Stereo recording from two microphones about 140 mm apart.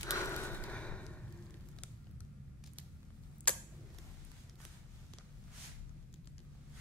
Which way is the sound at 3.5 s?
10° left (ahead or behind).